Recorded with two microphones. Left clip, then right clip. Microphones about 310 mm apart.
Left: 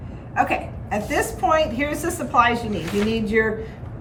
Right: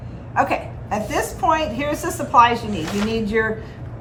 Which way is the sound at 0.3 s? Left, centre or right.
Centre.